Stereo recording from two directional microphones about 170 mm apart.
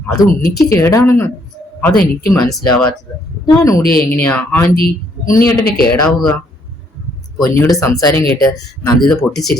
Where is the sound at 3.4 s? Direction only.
20° left (ahead or behind).